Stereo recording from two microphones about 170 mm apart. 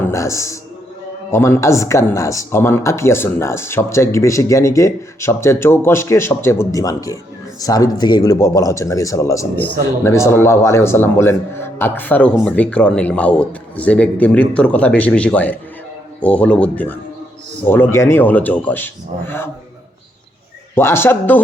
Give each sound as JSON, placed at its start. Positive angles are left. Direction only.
{"t": 0.0, "sound": "a man's voice", "side_deg": 15}
{"t": 20.7, "sound": "speech", "side_deg": 15}